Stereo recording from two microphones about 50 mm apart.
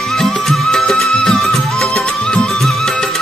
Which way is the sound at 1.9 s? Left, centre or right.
Centre.